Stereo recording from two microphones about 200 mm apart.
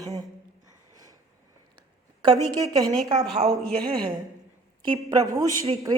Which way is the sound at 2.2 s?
20° right (ahead or behind).